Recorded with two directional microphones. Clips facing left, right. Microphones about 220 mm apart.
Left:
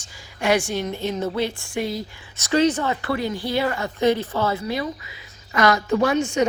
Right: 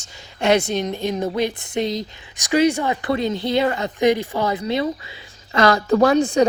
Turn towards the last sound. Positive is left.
turn(degrees=-35)  # may be behind; listen again after turning